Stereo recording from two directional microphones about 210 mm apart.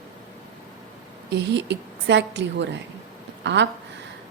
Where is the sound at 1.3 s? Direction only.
55° right (ahead or behind).